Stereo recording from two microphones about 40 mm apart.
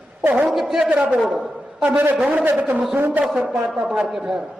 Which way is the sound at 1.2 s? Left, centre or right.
Centre.